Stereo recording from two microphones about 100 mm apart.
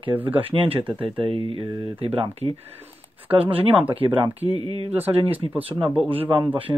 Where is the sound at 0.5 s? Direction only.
70° right (ahead or behind).